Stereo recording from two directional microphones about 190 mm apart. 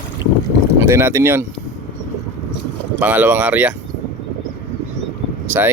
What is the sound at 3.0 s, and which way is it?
Speech, 10° right (ahead or behind).